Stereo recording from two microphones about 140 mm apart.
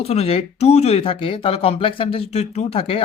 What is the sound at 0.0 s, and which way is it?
Speech, 45° left (ahead or behind).